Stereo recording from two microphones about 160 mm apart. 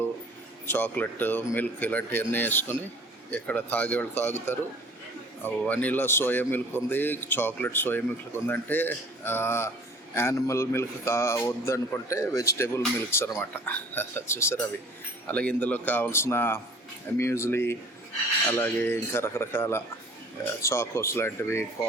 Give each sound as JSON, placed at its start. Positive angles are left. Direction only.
{"t": 0.7, "sound": "a man's voice", "side_deg": 10}